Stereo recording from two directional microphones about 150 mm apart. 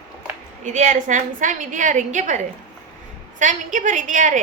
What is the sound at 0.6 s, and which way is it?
A woman's voice, 55° right (ahead or behind).